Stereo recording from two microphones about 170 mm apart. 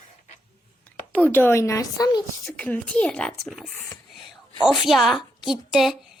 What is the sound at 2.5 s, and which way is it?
Speech, 10° left (ahead or behind).